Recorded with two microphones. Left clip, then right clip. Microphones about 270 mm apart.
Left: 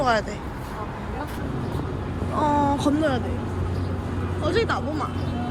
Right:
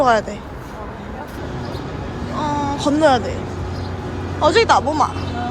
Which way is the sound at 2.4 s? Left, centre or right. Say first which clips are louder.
Even; centre.